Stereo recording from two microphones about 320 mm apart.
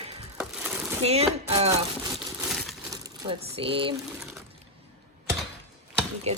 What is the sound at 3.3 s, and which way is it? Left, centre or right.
Speech, centre.